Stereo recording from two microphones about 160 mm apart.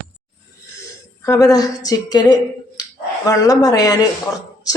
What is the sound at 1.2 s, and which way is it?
Speech, 20° left (ahead or behind).